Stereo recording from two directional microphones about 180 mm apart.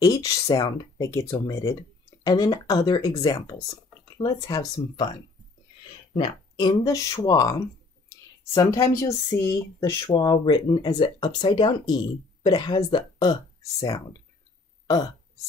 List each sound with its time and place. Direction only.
0.0 s speech: 20° left (ahead or behind)
6.1 s speech: 25° left (ahead or behind)
8.5 s speech: 15° left (ahead or behind)